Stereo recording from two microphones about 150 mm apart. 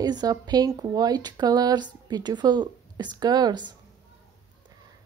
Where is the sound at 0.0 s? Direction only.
25° right (ahead or behind).